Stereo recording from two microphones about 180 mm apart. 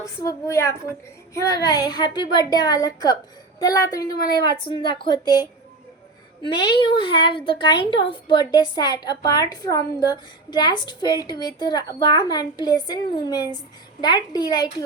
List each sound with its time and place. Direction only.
0.0 s a woman's voice: 20° left (ahead or behind)